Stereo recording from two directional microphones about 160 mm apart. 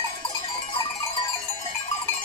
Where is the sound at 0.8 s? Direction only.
30° left (ahead or behind).